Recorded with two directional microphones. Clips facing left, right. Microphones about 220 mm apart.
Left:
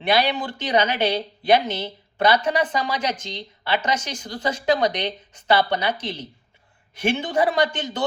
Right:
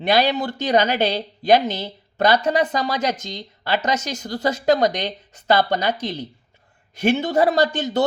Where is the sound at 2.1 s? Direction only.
40° right (ahead or behind).